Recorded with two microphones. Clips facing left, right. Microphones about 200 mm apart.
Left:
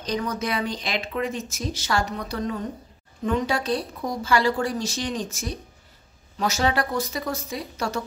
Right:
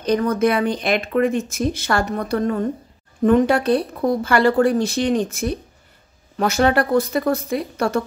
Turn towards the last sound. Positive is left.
turn(degrees=-55)  # may be behind; listen again after turning